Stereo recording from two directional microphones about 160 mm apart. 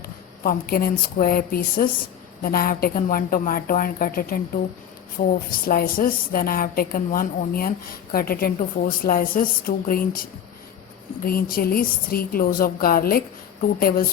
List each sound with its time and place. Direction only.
0.4 s a woman's voice: 65° left (ahead or behind)